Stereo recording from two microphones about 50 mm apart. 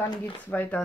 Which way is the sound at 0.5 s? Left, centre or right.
Left.